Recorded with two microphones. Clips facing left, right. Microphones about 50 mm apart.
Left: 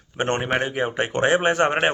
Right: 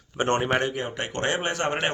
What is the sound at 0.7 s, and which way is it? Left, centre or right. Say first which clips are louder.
A man's voice: left 6 dB; left.